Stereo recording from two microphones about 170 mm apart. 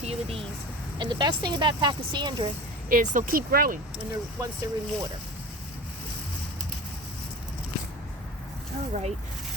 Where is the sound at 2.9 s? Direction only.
50° right (ahead or behind).